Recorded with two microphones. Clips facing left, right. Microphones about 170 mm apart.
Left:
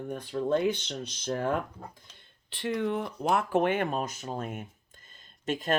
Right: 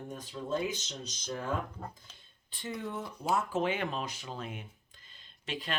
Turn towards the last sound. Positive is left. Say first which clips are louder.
# left 8 dB
turn(degrees=45)  # may be behind; listen again after turning